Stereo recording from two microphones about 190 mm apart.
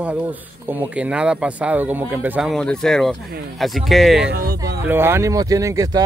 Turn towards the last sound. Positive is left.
turn(degrees=-15)  # may be behind; listen again after turning